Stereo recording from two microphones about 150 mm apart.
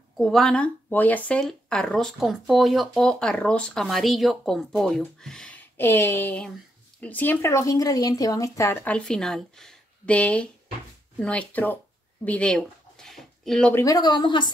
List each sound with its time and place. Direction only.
0.2 s speech: centre (ahead or behind)
12.3 s a sound: 10° left (ahead or behind)
13.7 s speech: 25° left (ahead or behind)